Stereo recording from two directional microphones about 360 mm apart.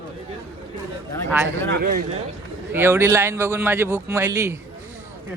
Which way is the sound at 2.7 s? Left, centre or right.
Centre.